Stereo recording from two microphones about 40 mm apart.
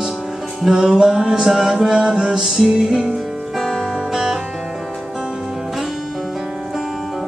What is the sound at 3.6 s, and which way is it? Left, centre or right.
Music, centre.